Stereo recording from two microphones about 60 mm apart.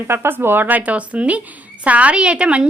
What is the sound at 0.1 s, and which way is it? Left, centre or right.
Speech, right.